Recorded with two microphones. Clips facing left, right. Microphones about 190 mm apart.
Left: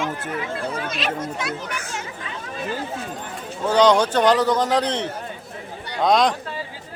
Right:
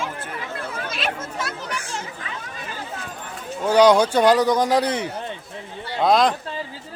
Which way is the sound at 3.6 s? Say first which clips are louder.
Right 2 dB; 10° right (ahead or behind).